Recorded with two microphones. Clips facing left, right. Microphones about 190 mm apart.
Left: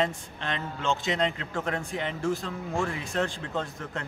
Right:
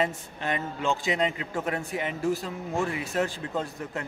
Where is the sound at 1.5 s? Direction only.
15° right (ahead or behind).